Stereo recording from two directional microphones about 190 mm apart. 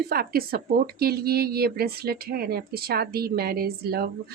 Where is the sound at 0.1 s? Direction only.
50° right (ahead or behind).